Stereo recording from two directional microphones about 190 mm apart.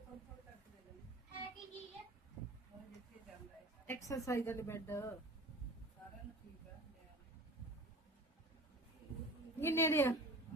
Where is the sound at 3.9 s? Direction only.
15° left (ahead or behind).